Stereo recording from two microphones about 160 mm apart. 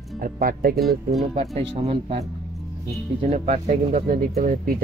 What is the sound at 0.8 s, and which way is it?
Speech, centre (ahead or behind).